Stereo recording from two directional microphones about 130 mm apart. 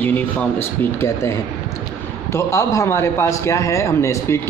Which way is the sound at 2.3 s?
25° left (ahead or behind).